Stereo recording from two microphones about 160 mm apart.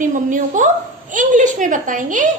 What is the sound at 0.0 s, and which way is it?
A woman's voice, 55° right (ahead or behind).